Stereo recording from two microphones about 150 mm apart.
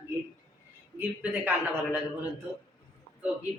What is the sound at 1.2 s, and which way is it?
A man's voice, 10° right (ahead or behind).